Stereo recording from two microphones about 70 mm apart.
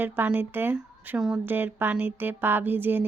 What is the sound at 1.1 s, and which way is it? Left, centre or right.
Speech, centre.